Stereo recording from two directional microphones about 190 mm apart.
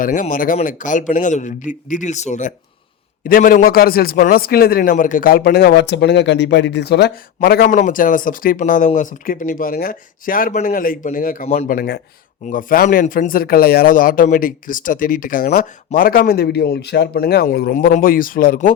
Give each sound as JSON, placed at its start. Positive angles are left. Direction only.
{"t": 0.0, "sound": "speech", "side_deg": 45}